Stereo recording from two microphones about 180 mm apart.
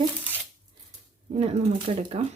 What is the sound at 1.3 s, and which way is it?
Speech, 30° right (ahead or behind).